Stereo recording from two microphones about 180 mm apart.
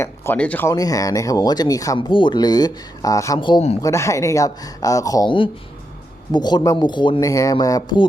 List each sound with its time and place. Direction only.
0.0 s speech: 10° left (ahead or behind); by 3.8 s 30° left (ahead or behind)
3.8 s speech: 15° left (ahead or behind)